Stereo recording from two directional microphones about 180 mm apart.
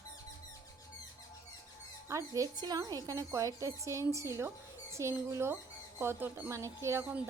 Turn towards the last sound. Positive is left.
turn(degrees=-10)  # may be behind; listen again after turning